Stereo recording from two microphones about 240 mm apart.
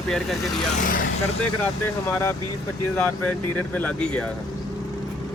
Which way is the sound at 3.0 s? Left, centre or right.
Centre.